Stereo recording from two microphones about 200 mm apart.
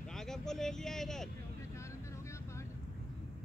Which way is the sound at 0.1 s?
Centre (ahead or behind).